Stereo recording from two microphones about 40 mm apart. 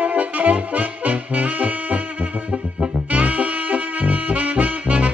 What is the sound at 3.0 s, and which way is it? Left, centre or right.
Music, right.